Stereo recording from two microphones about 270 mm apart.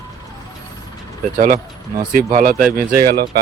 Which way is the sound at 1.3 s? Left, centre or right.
Right.